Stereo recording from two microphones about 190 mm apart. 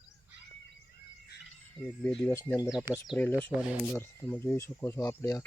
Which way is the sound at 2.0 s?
5° left (ahead or behind).